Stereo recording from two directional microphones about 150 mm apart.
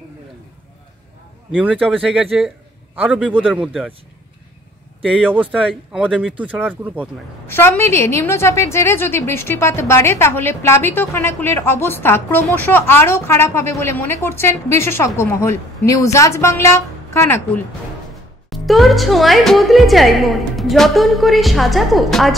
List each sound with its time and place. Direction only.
1.5 s a woman's voice: 10° right (ahead or behind)
5.0 s speech: 5° right (ahead or behind)
7.4 s a woman's voice: 15° left (ahead or behind)
18.5 s a woman's voice: centre (ahead or behind)